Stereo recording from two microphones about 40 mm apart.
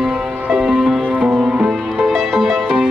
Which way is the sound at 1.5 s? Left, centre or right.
Centre.